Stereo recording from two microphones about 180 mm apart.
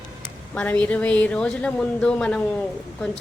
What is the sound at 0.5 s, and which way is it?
A woman's voice, 5° left (ahead or behind).